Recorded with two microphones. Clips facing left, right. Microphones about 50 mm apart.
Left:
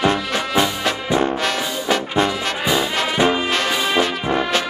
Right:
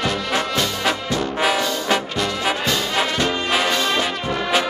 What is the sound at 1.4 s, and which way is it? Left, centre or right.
Brass instrument, centre.